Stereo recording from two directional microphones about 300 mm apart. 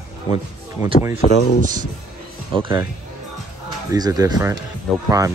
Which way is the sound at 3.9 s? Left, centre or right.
Centre.